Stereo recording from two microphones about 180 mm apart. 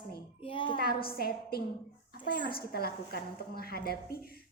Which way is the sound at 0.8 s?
55° left (ahead or behind).